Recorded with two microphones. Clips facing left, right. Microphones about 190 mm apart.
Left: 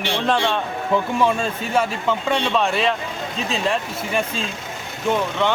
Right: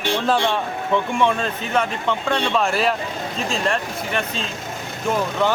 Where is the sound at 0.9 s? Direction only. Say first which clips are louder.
Even; 5° left (ahead or behind).